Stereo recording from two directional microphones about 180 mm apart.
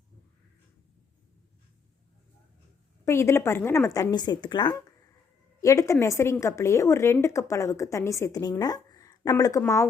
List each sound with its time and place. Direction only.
3.0 s a woman's voice: 15° left (ahead or behind)